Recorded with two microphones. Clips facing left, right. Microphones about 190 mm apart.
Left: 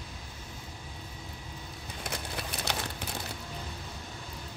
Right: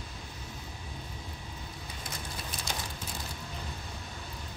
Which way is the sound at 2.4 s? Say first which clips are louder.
Left 4 dB; 65° left (ahead or behind).